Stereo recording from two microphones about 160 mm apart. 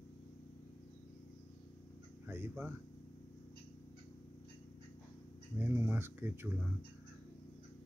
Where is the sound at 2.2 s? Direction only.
15° right (ahead or behind).